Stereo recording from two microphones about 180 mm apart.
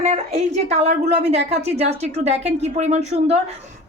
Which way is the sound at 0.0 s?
35° right (ahead or behind).